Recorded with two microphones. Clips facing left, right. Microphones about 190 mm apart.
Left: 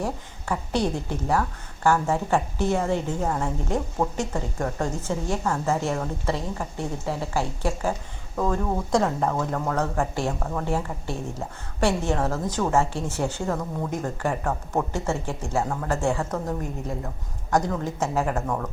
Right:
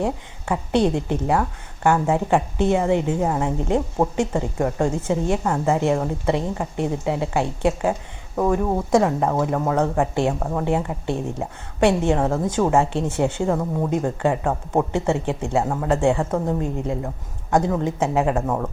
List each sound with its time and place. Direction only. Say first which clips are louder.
0.0 s a woman's voice: right 5 dB; 20° right (ahead or behind)